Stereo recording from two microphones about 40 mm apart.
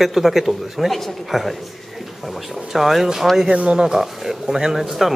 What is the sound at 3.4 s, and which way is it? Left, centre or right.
Speech, right.